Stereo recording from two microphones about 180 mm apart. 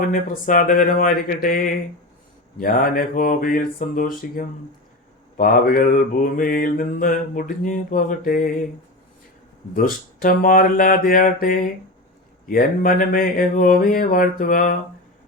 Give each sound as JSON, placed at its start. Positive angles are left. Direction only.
{"t": 0.1, "sound": "mantra", "side_deg": 50}
{"t": 9.7, "sound": "mantra", "side_deg": 50}